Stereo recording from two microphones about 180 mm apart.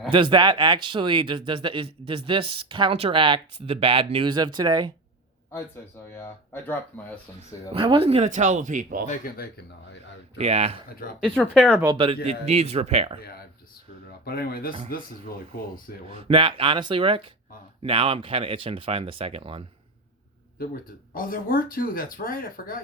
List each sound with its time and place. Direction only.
0.1 s speech: 25° right (ahead or behind)
6.1 s speech: 10° left (ahead or behind)
7.7 s speech: 30° right (ahead or behind); by 9.0 s 45° right (ahead or behind)
9.0 s speech: 55° left (ahead or behind)
10.3 s speech: 35° right (ahead or behind)
11.3 s speech: centre (ahead or behind)
11.8 s speech: 25° right (ahead or behind)
14.3 s speech: 55° left (ahead or behind)
16.0 s speech: 30° right (ahead or behind)
21.1 s speech: 50° left (ahead or behind)